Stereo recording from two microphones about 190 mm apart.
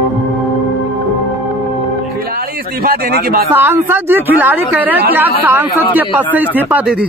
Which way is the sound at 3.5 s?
10° right (ahead or behind).